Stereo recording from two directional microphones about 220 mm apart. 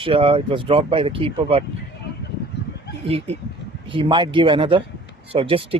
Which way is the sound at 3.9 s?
25° right (ahead or behind).